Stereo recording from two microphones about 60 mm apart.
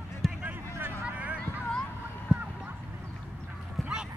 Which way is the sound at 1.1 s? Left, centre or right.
Right.